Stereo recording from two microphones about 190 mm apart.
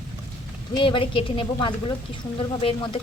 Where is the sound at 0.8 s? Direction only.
25° left (ahead or behind).